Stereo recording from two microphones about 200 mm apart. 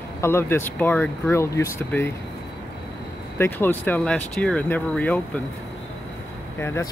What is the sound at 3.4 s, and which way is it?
Speech, 10° left (ahead or behind).